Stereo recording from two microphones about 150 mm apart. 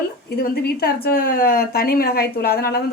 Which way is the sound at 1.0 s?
80° left.